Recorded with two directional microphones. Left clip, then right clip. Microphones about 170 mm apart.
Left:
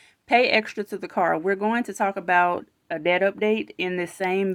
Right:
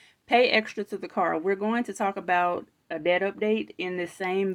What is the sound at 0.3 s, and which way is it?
Speech, 30° left (ahead or behind).